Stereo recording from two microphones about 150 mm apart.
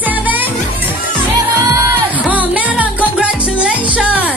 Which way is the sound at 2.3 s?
10° right (ahead or behind).